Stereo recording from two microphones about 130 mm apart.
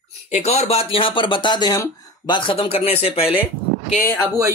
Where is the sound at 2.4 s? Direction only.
40° left (ahead or behind).